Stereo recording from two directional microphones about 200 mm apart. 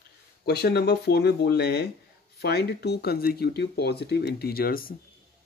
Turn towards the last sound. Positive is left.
turn(degrees=45)  # may be behind; listen again after turning